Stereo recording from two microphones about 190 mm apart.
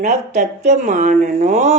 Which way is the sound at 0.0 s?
40° right (ahead or behind).